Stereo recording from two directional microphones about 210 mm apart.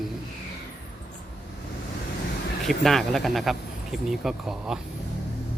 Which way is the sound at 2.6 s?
Centre (ahead or behind).